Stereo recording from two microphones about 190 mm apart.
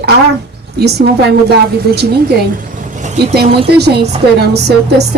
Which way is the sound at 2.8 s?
40° right (ahead or behind).